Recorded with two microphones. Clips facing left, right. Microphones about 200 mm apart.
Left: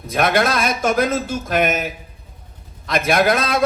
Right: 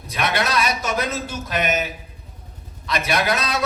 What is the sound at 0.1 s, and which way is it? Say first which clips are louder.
Speech: left 5 dB; 50° left (ahead or behind).